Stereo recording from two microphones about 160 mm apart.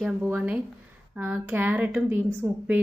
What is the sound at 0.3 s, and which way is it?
A woman's voice, 10° right (ahead or behind).